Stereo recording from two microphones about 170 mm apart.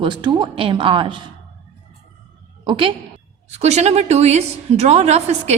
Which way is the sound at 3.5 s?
40° right (ahead or behind).